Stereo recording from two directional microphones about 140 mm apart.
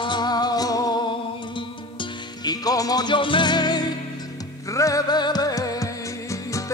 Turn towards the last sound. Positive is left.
turn(degrees=25)  # may be behind; listen again after turning